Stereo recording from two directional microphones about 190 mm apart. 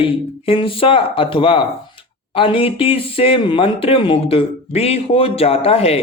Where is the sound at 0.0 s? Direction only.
30° left (ahead or behind).